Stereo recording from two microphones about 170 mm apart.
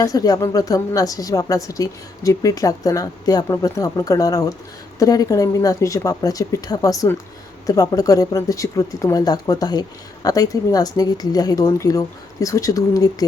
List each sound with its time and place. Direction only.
0.0 s a woman's voice: 20° left (ahead or behind)